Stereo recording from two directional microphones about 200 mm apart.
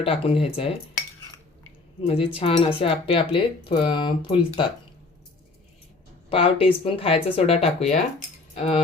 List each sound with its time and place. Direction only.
0.0 s speech: 30° left (ahead or behind)
2.0 s speech: 30° left (ahead or behind)
6.3 s speech: 30° left (ahead or behind)